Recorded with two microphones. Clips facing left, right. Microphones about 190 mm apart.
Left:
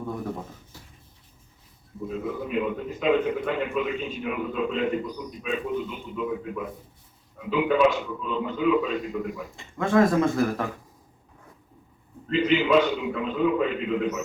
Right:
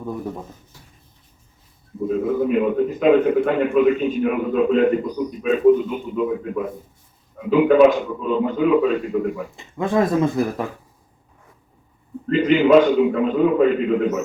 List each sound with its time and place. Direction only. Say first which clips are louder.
2.0 s a man's voice: right 11 dB; 50° right (ahead or behind)
9.7 s speech: right 2 dB; 20° right (ahead or behind)
12.3 s a man's voice: right 7 dB; 50° right (ahead or behind)